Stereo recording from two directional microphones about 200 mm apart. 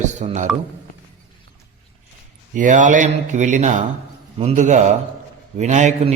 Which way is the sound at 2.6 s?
40° right (ahead or behind).